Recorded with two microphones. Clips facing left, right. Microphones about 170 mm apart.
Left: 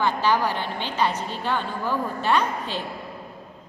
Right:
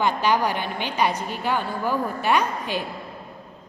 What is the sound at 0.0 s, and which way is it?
A woman's voice, 15° right (ahead or behind).